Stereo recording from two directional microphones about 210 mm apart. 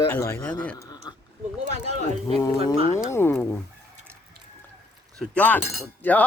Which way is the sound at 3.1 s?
10° left (ahead or behind).